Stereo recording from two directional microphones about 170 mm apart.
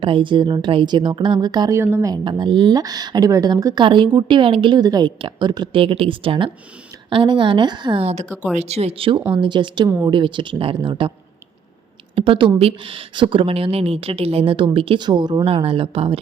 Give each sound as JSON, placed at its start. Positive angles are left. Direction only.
{"t": 0.0, "sound": "a woman's voice", "side_deg": -30}
{"t": 12.1, "sound": "a woman's voice", "side_deg": -30}